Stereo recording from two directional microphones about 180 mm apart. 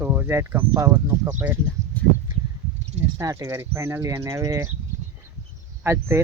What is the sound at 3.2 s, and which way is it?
Speech, 15° right (ahead or behind).